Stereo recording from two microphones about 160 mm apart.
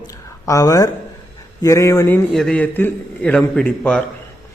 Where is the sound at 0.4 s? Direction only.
20° left (ahead or behind).